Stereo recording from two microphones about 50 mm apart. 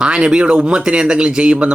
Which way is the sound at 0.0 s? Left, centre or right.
Centre.